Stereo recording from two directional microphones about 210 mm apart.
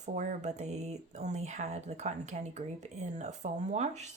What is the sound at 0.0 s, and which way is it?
Speech, 35° right (ahead or behind).